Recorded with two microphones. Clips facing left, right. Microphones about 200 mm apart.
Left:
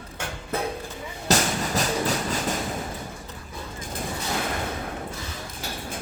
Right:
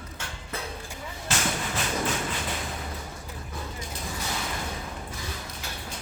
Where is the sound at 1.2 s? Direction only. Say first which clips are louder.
Left 6 dB; 40° left (ahead or behind).